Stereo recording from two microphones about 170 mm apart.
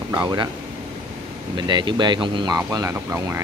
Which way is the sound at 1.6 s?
25° right (ahead or behind).